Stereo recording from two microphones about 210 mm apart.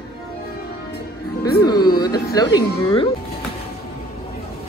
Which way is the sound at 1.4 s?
20° left (ahead or behind).